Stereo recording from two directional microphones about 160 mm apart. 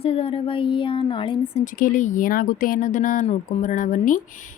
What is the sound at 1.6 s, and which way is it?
Speech, 55° left (ahead or behind).